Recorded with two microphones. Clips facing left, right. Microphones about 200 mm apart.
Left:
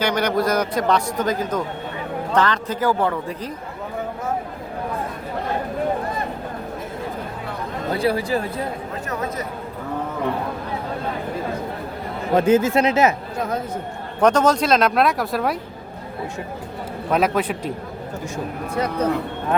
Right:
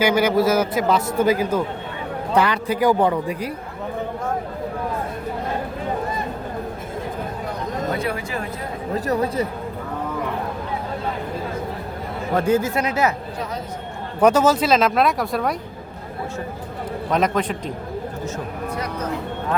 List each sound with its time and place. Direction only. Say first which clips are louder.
0.0 s a man's voice: right 3 dB; 5° right (ahead or behind)
7.9 s speech: left 5 dB; 35° left (ahead or behind)
9.0 s a man's voice: right 6 dB; 30° right (ahead or behind)
12.3 s speech: left 3 dB; 20° left (ahead or behind)
14.2 s a man's voice: right 1 dB; 5° right (ahead or behind)
17.1 s a man's voice: left 1 dB; 5° left (ahead or behind)